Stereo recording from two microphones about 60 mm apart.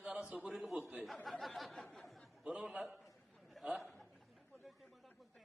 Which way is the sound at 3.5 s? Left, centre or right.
Centre.